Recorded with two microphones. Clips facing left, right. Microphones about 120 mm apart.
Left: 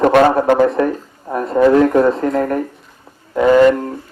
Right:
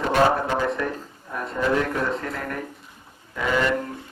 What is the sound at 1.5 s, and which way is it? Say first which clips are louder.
Speech: left 13 dB; 45° left (ahead or behind).